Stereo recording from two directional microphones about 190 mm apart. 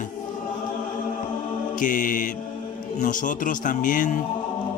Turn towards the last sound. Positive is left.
turn(degrees=45)  # may be behind; listen again after turning